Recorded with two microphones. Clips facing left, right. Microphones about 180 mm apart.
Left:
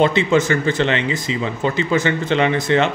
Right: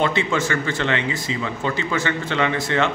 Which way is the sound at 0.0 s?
20° left (ahead or behind).